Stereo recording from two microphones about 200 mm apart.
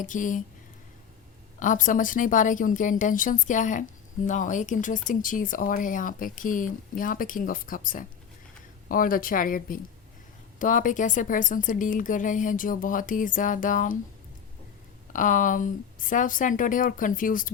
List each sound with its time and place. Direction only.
0.0 s speech: 40° left (ahead or behind)
1.5 s a woman's voice: 40° left (ahead or behind)
15.1 s speech: 40° left (ahead or behind)